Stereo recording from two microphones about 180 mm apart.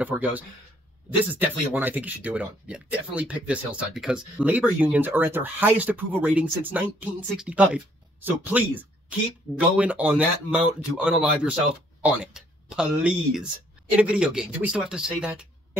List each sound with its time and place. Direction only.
0.0 s speech: 10° right (ahead or behind)